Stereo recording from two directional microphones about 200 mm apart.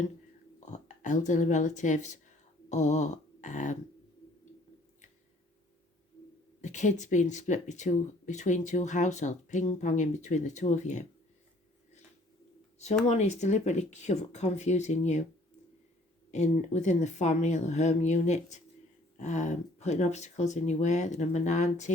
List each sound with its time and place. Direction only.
0.6 s speech: 40° left (ahead or behind)
2.6 s a sound: 35° left (ahead or behind)
6.6 s speech: 35° left (ahead or behind)
13.1 s speech: 35° left (ahead or behind)
16.3 s speech: 35° left (ahead or behind)